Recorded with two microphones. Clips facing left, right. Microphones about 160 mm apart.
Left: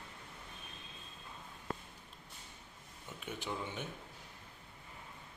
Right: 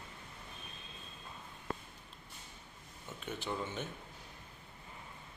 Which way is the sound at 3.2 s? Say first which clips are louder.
Right 2 dB; 10° left (ahead or behind).